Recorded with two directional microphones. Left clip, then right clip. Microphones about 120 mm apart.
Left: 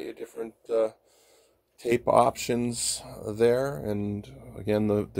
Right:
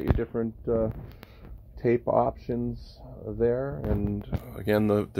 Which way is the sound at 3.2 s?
25° left (ahead or behind).